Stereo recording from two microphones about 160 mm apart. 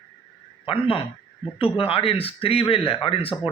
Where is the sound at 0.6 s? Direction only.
35° left (ahead or behind).